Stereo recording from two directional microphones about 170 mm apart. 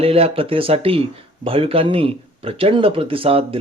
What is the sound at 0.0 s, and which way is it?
Speech, 35° right (ahead or behind).